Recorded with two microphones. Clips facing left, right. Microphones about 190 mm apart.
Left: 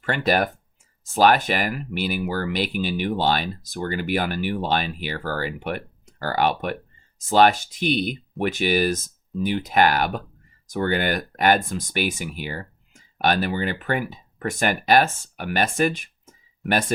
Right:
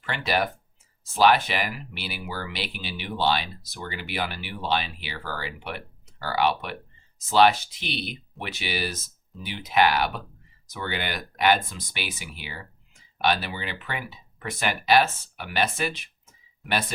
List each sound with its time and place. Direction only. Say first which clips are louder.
0.0 s speech: left 5 dB; 45° left (ahead or behind)